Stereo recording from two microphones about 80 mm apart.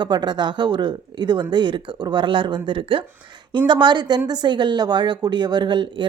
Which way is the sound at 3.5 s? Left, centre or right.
Right.